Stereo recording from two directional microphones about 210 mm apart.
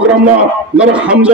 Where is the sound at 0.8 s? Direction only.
5° right (ahead or behind).